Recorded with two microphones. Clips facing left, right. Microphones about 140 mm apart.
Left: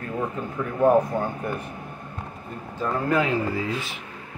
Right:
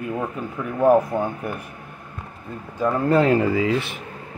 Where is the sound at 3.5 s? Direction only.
90° right.